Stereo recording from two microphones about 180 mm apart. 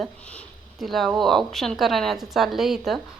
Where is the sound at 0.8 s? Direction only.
Centre (ahead or behind).